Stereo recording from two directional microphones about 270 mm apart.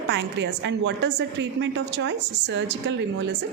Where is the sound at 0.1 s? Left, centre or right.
Right.